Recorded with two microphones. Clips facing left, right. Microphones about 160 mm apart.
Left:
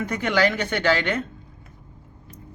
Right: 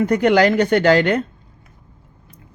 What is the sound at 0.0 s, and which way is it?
Speech, 35° right (ahead or behind).